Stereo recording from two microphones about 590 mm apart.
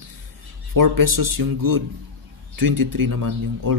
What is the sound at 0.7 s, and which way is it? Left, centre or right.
Speech, right.